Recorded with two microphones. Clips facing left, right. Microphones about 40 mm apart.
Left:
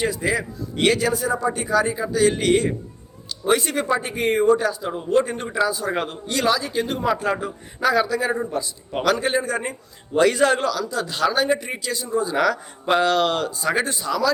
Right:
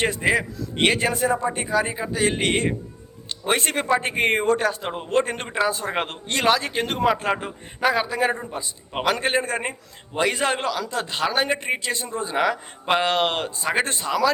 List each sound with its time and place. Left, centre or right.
0.2 s a man's voice: right
1.5 s a man's voice: right
3.2 s a sound: right
3.6 s a man's voice: right
5.6 s a man's voice: right
9.2 s a man's voice: right
10.2 s a man's voice: centre
13.8 s a man's voice: right